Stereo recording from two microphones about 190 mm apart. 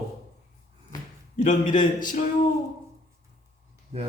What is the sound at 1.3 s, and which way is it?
Speech, 40° left (ahead or behind).